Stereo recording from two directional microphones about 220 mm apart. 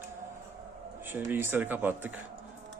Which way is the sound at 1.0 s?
10° right (ahead or behind).